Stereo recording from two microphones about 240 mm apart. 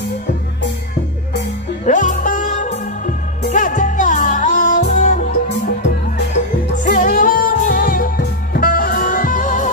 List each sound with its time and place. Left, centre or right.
1.9 s music: left
6.7 s music: left